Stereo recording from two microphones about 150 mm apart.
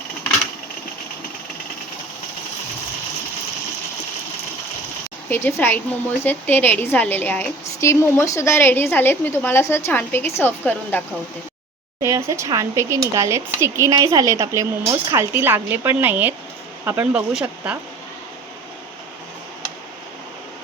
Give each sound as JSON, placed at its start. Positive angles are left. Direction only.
{"t": 5.3, "sound": "a woman's voice", "side_deg": 15}
{"t": 12.0, "sound": "speech", "side_deg": -20}